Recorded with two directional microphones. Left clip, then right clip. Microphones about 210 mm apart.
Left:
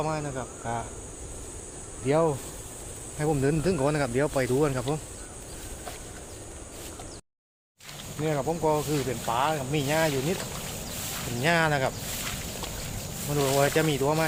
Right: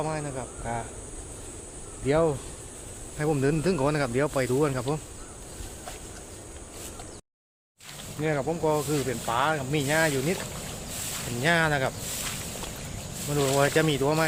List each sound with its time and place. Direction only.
0.0 s speech: 20° left (ahead or behind)
2.0 s speech: centre (ahead or behind)
8.2 s speech: 10° right (ahead or behind)
11.4 s speech: 5° right (ahead or behind)
13.3 s speech: centre (ahead or behind)
13.6 s speech: 15° right (ahead or behind)